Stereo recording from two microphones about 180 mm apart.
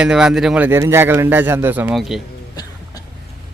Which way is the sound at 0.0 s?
5° right (ahead or behind).